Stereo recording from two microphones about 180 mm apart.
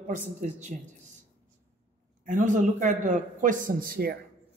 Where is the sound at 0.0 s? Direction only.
40° right (ahead or behind).